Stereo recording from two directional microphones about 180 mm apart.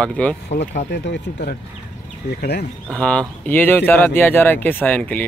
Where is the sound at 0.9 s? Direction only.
70° left (ahead or behind).